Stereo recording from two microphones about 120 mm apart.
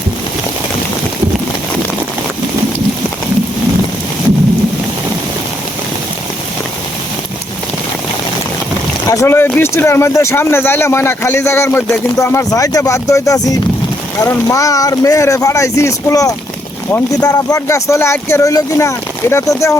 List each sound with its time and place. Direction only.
9.0 s speech: 25° left (ahead or behind)